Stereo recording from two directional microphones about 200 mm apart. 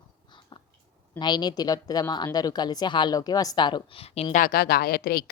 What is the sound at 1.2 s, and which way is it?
Speech, 20° left (ahead or behind).